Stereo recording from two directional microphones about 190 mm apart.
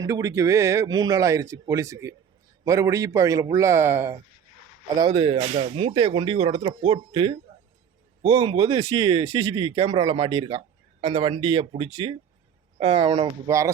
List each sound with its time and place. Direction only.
0.0 s speech: 15° right (ahead or behind)
4.9 s speech: 25° right (ahead or behind)
13.5 s speech: 15° right (ahead or behind)